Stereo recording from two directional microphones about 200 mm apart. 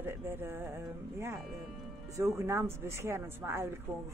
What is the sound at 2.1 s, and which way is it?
A woman's voice, 15° right (ahead or behind).